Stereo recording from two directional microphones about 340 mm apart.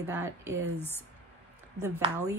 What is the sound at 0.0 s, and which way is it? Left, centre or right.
Speech, centre.